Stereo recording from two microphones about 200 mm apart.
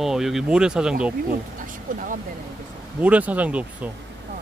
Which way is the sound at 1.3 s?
40° right (ahead or behind).